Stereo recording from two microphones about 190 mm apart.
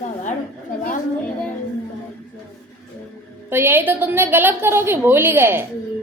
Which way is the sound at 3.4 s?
10° right (ahead or behind).